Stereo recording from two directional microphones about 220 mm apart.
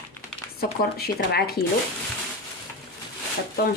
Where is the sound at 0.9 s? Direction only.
45° left (ahead or behind).